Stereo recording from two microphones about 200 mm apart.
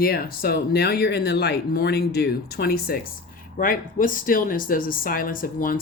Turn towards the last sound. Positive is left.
turn(degrees=45)  # may be behind; listen again after turning